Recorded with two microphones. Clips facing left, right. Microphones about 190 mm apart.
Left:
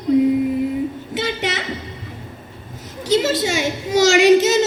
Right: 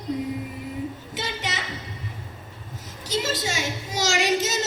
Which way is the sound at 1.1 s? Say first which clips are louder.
Left 9 dB; 65° left (ahead or behind).